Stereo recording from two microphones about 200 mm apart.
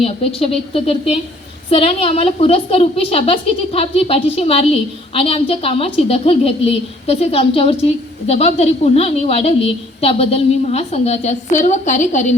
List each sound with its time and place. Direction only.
0.0 s a woman's voice: 30° left (ahead or behind)